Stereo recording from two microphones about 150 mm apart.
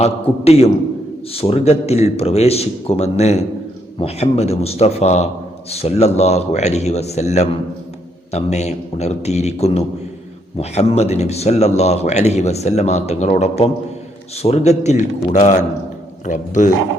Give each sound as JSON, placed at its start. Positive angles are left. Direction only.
{"t": 0.0, "sound": "speech", "side_deg": 45}